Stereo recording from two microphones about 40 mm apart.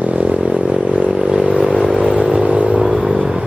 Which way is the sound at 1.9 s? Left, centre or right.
Right.